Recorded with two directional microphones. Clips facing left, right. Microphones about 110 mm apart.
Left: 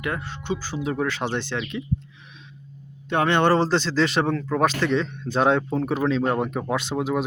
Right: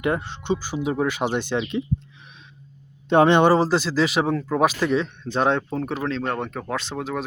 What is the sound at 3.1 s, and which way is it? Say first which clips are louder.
Speech: right 4 dB; 20° right (ahead or behind).